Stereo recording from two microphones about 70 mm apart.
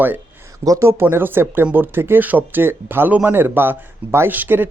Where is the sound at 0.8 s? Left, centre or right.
Right.